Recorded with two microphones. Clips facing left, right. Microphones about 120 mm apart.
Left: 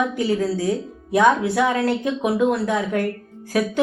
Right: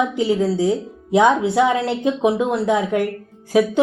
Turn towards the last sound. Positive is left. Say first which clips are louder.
# right 5 dB
turn(degrees=-20)  # may be behind; listen again after turning